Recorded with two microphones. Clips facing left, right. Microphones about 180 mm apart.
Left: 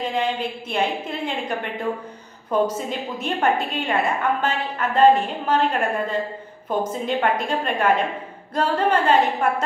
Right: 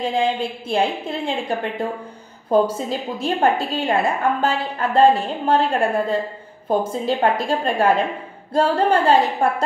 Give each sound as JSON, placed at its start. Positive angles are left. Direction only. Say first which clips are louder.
{"t": 0.0, "sound": "a woman's voice", "louder": "right 3 dB", "side_deg": -30}
{"t": 2.5, "sound": "a woman's voice", "louder": "right 4 dB", "side_deg": -30}